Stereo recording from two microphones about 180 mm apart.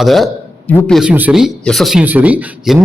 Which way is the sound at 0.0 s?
Centre (ahead or behind).